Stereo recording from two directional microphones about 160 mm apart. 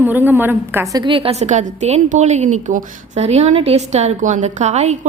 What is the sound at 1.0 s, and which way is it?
A woman's voice, 35° right (ahead or behind).